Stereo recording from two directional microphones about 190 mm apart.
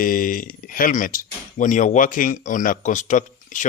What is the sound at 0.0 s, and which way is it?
Speech, 45° left (ahead or behind).